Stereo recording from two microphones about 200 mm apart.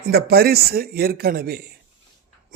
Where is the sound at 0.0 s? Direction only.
50° right (ahead or behind).